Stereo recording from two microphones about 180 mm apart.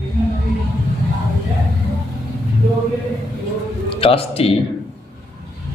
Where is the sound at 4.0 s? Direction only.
30° left (ahead or behind).